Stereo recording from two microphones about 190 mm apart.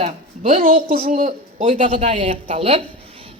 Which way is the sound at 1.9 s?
30° right (ahead or behind).